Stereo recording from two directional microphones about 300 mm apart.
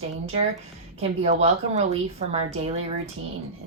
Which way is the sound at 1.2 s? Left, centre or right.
Right.